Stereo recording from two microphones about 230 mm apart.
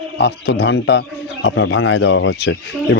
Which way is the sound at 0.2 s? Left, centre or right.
Left.